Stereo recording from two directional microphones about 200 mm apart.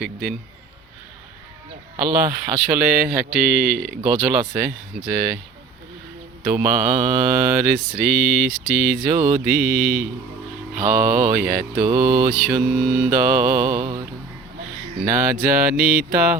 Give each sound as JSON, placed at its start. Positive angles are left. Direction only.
{"t": 0.0, "sound": "speech", "side_deg": 0}
{"t": 2.0, "sound": "speech", "side_deg": -10}
{"t": 6.4, "sound": "speech", "side_deg": -5}
{"t": 10.8, "sound": "mantra", "side_deg": -5}
{"t": 11.9, "sound": "speech", "side_deg": -5}
{"t": 15.0, "sound": "speech", "side_deg": -5}